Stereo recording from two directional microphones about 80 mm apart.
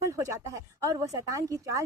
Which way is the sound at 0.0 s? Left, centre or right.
Right.